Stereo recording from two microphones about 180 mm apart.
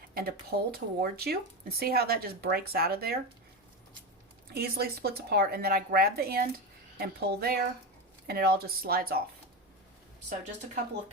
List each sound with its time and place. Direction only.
0.1 s speech: 60° right (ahead or behind)
4.5 s speech: 60° right (ahead or behind)